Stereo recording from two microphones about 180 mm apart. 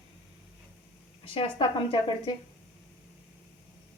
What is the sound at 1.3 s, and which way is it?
Speech, 30° left (ahead or behind).